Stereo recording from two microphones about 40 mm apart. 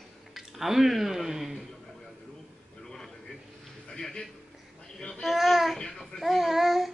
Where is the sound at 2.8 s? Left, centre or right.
Centre.